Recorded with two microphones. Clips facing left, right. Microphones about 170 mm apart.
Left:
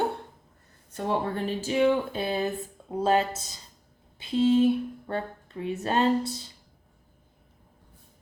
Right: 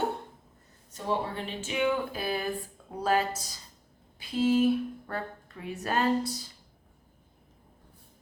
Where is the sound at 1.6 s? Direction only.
35° left (ahead or behind).